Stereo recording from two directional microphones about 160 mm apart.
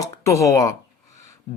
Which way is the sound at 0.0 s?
20° left (ahead or behind).